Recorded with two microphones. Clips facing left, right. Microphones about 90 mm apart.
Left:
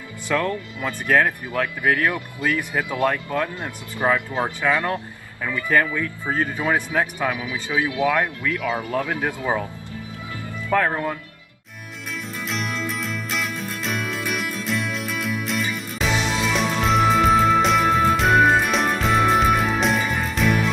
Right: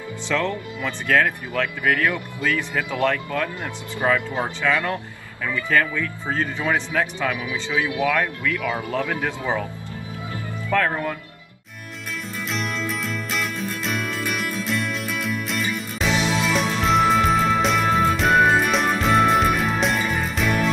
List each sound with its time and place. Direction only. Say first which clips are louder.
0.3 s speech: left 1 dB; 15° left (ahead or behind)
10.7 s speech: left 1 dB; 15° left (ahead or behind)
12.4 s music: even; centre (ahead or behind)